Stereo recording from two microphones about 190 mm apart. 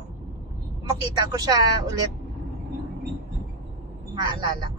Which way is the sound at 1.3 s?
20° right (ahead or behind).